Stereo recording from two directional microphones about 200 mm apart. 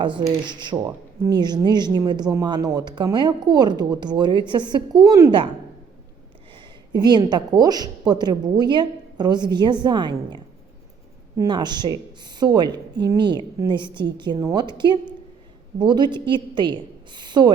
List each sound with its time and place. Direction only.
0.3 s speech: 20° right (ahead or behind)
6.9 s speech: 20° right (ahead or behind)